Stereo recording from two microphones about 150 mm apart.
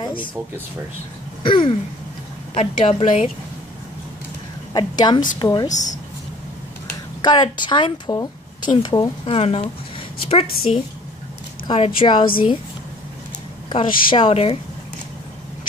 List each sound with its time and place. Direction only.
0.0 s a sound: 30° left (ahead or behind)
1.4 s a sound: 35° left (ahead or behind)
2.5 s a woman's voice: 40° left (ahead or behind)
4.7 s speech: 30° left (ahead or behind)
7.2 s speech: 30° left (ahead or behind)
9.2 s a woman's voice: 45° left (ahead or behind)
13.7 s a woman's voice: 35° left (ahead or behind)